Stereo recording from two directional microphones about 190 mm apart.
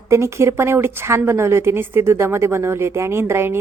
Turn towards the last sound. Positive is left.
turn(degrees=-15)  # may be behind; listen again after turning